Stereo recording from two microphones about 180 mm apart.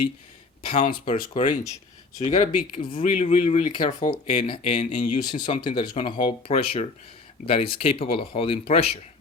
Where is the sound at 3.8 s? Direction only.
25° left (ahead or behind).